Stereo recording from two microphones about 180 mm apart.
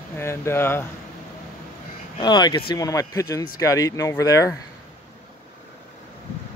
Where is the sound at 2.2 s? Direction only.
25° left (ahead or behind).